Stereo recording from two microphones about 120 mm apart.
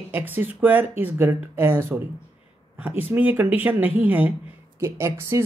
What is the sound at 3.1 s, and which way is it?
Speech, 15° right (ahead or behind).